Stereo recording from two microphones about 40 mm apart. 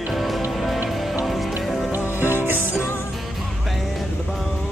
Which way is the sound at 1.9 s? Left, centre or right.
Right.